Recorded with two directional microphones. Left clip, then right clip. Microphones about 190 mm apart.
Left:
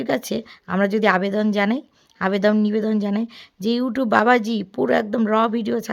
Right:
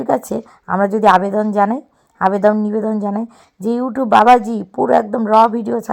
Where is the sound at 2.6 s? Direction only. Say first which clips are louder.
Right 3 dB; 30° left (ahead or behind).